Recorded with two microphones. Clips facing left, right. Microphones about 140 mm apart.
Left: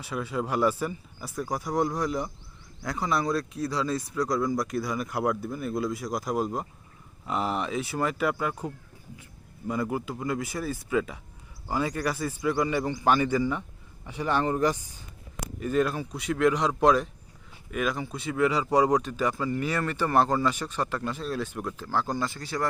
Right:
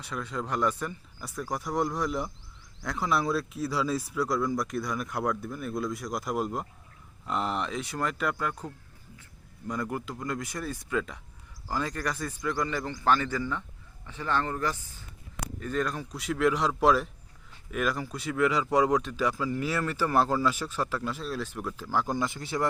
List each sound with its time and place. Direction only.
0.0 s a man's voice: 5° left (ahead or behind); by 22.6 s 20° right (ahead or behind)